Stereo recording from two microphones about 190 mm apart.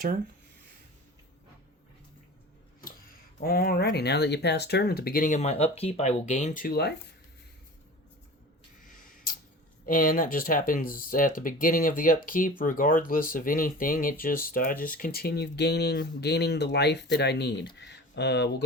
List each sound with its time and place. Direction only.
3.4 s speech: 50° left (ahead or behind)
9.8 s speech: 45° left (ahead or behind); by 18.5 s 65° left (ahead or behind)